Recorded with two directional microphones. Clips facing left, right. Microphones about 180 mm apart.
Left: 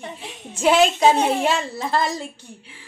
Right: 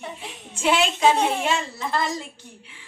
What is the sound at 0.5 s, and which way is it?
A woman's voice, 40° left (ahead or behind).